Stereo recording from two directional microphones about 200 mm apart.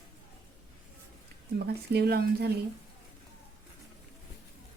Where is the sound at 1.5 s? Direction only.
55° right (ahead or behind).